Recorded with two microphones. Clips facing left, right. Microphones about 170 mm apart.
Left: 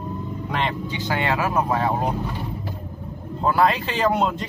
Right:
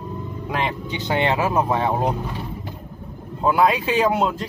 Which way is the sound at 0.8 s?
20° right (ahead or behind).